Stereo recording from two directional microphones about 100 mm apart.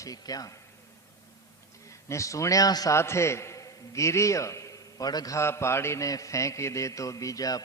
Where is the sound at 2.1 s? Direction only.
30° left (ahead or behind).